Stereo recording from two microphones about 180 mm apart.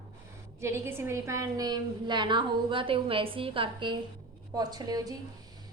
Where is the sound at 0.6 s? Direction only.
15° right (ahead or behind).